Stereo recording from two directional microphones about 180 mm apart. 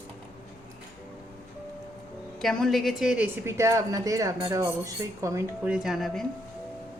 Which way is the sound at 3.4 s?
15° right (ahead or behind).